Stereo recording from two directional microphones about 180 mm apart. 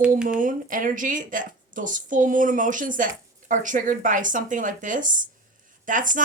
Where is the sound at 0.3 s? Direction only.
45° right (ahead or behind).